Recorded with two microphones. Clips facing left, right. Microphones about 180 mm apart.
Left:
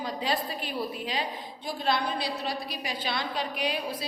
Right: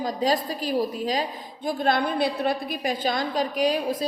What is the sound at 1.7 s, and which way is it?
A woman's voice, 50° right (ahead or behind).